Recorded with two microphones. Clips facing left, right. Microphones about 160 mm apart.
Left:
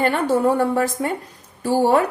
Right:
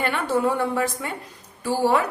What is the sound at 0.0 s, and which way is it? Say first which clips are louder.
A woman's voice: left 5 dB; 40° left (ahead or behind).